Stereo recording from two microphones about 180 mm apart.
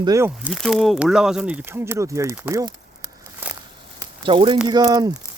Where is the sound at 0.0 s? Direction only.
20° right (ahead or behind).